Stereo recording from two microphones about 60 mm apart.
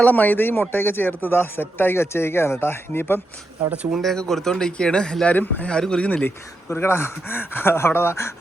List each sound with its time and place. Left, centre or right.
0.0 s speech: left
3.9 s speech: centre
5.2 s speech: left
5.8 s speech: centre
6.2 s speech: left